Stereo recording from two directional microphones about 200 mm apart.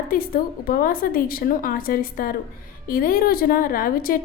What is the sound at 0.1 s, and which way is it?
A woman's voice, 45° left (ahead or behind).